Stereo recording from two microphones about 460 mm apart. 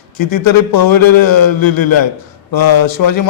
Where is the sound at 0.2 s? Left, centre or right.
Left.